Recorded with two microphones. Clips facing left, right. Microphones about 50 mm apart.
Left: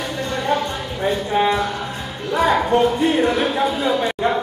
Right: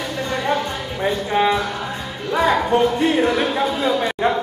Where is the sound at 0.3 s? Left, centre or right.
Centre.